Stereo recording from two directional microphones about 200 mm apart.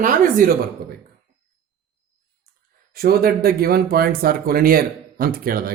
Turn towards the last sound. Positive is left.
turn(degrees=-45)  # may be behind; listen again after turning